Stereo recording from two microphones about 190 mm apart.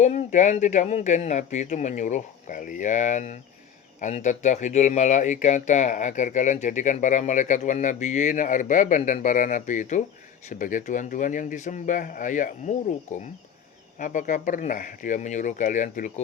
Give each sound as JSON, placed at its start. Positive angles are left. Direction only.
{"t": 0.0, "sound": "speech", "side_deg": 40}